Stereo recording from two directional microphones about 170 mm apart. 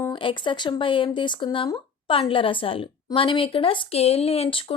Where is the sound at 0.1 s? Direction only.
30° left (ahead or behind).